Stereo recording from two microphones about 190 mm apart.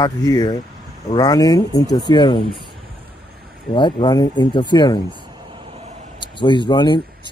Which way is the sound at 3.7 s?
25° left (ahead or behind).